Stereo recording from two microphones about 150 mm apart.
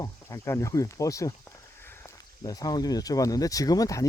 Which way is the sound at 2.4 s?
25° left (ahead or behind).